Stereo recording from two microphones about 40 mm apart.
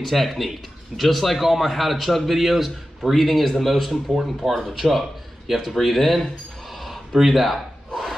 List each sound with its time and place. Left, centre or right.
0.0 s a man's voice: centre
6.7 s gasp: centre